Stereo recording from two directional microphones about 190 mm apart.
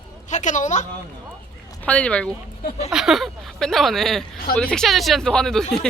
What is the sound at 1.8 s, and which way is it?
Speech, 5° left (ahead or behind).